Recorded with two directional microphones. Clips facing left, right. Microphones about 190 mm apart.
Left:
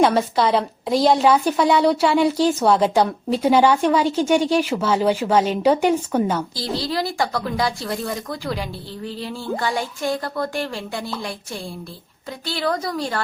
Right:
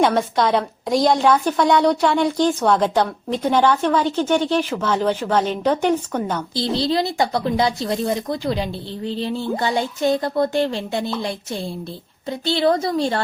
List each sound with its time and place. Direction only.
0.0 s a woman's voice: centre (ahead or behind)
6.6 s speech: 25° right (ahead or behind)